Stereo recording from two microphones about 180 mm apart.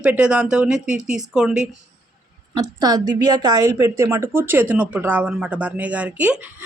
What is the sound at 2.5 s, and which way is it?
A woman's voice, 20° right (ahead or behind).